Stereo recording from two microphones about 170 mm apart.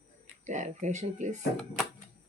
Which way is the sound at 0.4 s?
45° right (ahead or behind).